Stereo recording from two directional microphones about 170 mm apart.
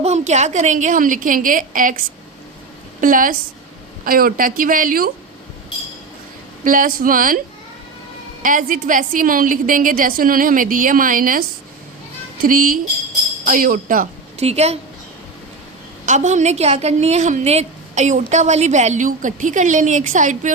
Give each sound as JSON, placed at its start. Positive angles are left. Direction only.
{"t": 0.0, "sound": "a woman's voice", "side_deg": -40}
{"t": 3.0, "sound": "a woman's voice", "side_deg": -50}
{"t": 6.7, "sound": "a woman's voice", "side_deg": -55}
{"t": 8.4, "sound": "a woman's voice", "side_deg": -50}
{"t": 14.4, "sound": "a woman's voice", "side_deg": -40}
{"t": 16.0, "sound": "a woman's voice", "side_deg": -45}